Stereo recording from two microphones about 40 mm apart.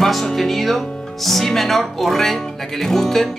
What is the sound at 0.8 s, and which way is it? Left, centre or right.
Music, centre.